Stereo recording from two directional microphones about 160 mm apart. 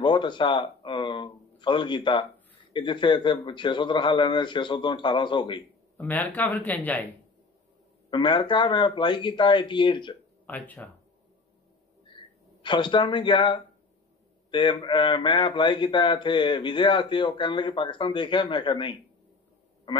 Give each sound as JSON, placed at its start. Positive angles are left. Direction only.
{"t": 0.0, "sound": "a man's voice", "side_deg": 30}
{"t": 5.9, "sound": "speech", "side_deg": 10}
{"t": 8.1, "sound": "a man's voice", "side_deg": 30}
{"t": 10.4, "sound": "speech", "side_deg": 10}
{"t": 12.6, "sound": "a man's voice", "side_deg": 30}